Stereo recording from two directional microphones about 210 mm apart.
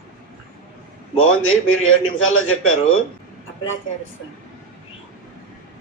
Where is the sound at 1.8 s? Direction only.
75° left (ahead or behind).